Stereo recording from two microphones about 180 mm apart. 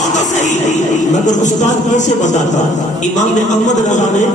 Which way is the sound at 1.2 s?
40° left (ahead or behind).